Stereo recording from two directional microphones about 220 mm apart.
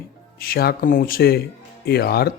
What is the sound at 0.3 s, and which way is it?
A man's voice, 45° left (ahead or behind).